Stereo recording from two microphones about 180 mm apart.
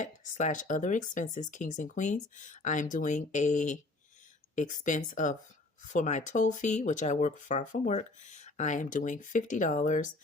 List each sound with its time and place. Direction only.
0.0 s speech: 45° left (ahead or behind)